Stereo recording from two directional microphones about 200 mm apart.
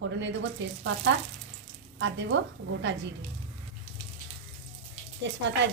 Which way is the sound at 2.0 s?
65° right (ahead or behind).